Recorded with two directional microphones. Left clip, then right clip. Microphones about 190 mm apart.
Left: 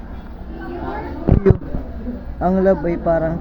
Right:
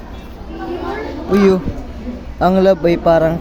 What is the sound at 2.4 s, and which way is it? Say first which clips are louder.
Speech: right 5 dB; 40° right (ahead or behind).